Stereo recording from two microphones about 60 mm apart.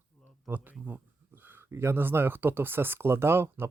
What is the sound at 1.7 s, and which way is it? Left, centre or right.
Speech, right.